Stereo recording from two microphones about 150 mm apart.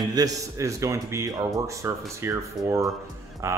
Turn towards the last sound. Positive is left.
turn(degrees=-20)  # may be behind; listen again after turning